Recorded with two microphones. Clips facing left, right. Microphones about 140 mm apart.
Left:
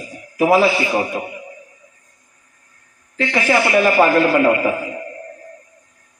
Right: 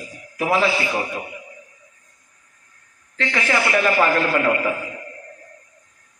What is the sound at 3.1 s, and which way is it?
A man's voice, 15° left (ahead or behind).